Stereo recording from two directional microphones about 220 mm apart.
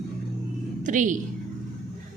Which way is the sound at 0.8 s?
35° right (ahead or behind).